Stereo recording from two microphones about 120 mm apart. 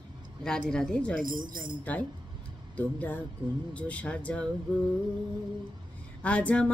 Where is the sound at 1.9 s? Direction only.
15° left (ahead or behind).